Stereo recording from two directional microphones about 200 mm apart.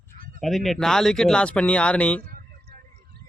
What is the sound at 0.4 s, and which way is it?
Speech, centre (ahead or behind).